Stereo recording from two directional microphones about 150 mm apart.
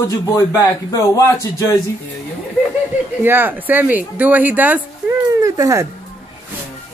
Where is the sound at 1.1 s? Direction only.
20° left (ahead or behind).